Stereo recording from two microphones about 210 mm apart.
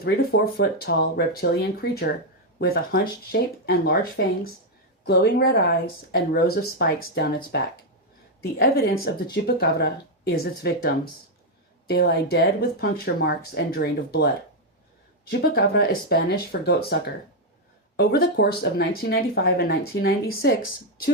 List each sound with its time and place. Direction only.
0.0 s speech: 50° left (ahead or behind)
11.9 s speech: 50° left (ahead or behind)
15.3 s speech: 50° left (ahead or behind)
17.9 s speech: 50° left (ahead or behind)